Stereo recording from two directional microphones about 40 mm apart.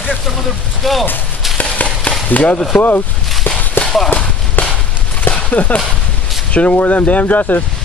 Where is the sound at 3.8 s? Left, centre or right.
Left.